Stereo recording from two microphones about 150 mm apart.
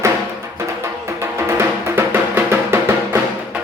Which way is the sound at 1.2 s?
15° right (ahead or behind).